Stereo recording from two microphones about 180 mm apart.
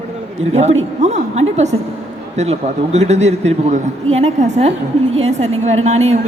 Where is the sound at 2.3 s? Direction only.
40° right (ahead or behind).